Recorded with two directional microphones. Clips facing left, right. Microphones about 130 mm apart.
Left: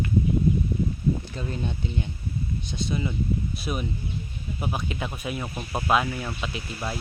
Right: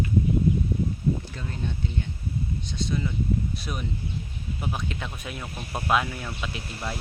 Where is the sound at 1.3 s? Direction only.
20° left (ahead or behind).